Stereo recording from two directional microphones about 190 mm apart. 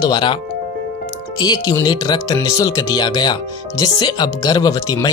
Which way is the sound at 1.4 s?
20° left (ahead or behind).